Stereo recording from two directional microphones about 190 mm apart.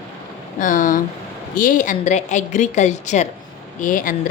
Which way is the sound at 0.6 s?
45° left (ahead or behind).